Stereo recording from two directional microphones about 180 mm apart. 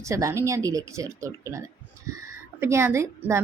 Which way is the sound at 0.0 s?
15° right (ahead or behind).